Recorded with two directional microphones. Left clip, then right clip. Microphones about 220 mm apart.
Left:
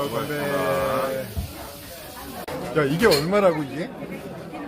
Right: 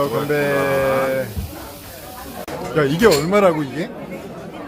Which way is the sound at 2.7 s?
5° right (ahead or behind).